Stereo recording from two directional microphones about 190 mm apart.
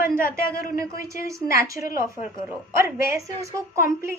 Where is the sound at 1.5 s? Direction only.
15° right (ahead or behind).